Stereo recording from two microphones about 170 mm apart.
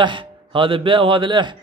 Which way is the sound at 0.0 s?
30° right (ahead or behind).